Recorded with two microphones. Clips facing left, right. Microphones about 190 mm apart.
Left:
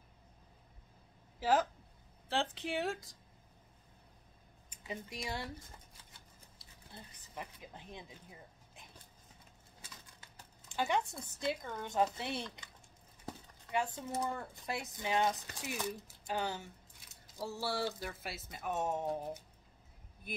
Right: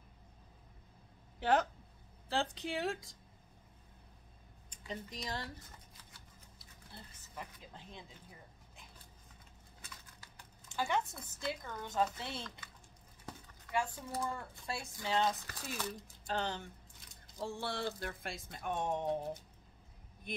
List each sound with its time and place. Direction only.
1.4 s speech: centre (ahead or behind)
4.6 s speech: 10° left (ahead or behind)
6.9 s speech: 15° left (ahead or behind)
11.3 s speech: 20° left (ahead or behind); by 20.4 s 5° left (ahead or behind)